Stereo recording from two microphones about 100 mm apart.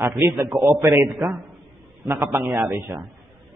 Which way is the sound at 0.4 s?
20° right (ahead or behind).